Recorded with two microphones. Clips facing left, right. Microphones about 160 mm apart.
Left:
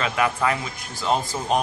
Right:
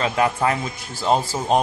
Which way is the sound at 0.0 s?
30° right (ahead or behind).